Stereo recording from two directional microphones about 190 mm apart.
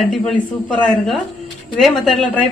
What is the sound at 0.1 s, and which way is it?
Speech, centre (ahead or behind).